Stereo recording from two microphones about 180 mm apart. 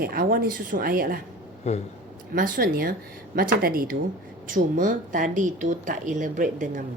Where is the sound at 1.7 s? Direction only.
35° left (ahead or behind).